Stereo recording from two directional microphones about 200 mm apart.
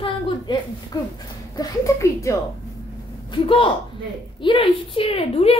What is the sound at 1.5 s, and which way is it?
Speech, 15° left (ahead or behind).